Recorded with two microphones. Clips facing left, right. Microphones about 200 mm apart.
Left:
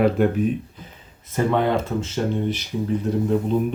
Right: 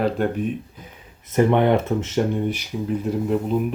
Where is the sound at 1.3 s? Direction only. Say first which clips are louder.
Right 3 dB; 20° right (ahead or behind).